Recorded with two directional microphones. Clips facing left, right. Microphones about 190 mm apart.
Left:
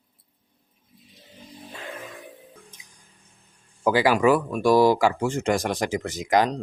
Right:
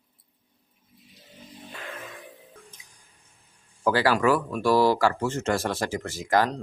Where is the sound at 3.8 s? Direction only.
15° left (ahead or behind).